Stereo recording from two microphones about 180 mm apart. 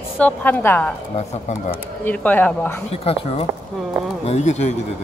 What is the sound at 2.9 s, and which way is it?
Speech, 35° left (ahead or behind).